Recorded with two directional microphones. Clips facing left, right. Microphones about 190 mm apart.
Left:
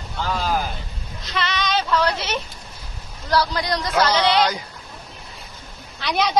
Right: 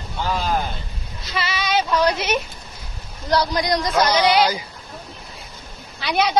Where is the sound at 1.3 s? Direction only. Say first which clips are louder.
Right 1 dB; 5° right (ahead or behind).